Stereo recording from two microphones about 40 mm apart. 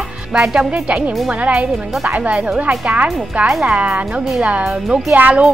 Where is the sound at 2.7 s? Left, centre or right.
Right.